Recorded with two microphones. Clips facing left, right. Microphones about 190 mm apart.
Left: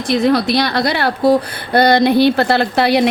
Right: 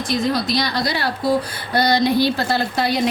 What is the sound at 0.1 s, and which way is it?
A woman's voice, 65° left (ahead or behind).